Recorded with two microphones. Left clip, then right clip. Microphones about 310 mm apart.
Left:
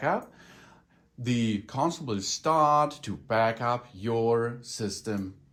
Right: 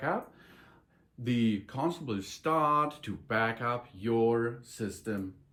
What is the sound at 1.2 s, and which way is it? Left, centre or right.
Speech, centre.